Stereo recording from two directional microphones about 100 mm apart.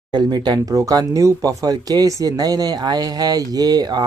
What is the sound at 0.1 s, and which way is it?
Speech, 45° right (ahead or behind).